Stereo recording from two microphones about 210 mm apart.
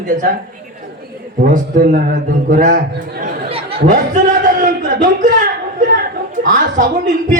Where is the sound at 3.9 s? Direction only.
40° right (ahead or behind).